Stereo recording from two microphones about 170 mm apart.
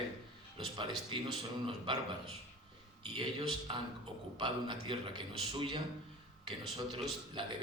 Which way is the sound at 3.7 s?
30° right (ahead or behind).